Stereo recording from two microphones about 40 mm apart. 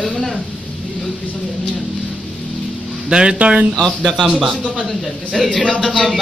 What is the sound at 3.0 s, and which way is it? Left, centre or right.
Speech, right.